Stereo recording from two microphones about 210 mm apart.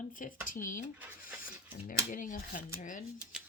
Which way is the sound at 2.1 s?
40° left (ahead or behind).